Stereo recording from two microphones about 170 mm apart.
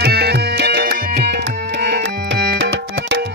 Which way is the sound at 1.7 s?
85° right.